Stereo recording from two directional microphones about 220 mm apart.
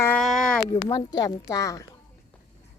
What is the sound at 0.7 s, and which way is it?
A woman's voice, 15° left (ahead or behind).